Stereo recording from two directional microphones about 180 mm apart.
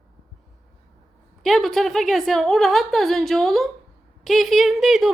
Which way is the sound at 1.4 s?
Centre (ahead or behind).